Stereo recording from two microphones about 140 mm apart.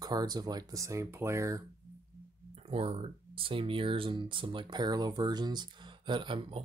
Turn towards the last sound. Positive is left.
turn(degrees=-35)  # may be behind; listen again after turning